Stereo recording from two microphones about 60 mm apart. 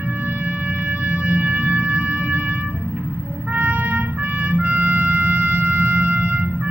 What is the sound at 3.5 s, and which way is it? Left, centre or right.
Trumpet, right.